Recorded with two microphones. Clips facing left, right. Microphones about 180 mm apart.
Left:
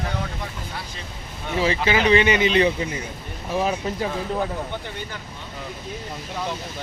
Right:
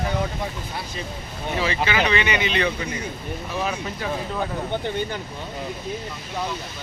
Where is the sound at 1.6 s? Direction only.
40° left (ahead or behind).